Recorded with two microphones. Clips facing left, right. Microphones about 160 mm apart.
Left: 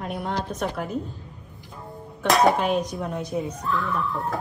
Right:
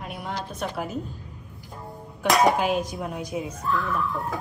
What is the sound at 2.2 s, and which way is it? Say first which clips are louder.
Speech: left 1 dB; centre (ahead or behind).